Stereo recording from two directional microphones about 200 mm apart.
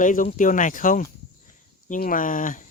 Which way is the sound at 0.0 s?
40° left (ahead or behind).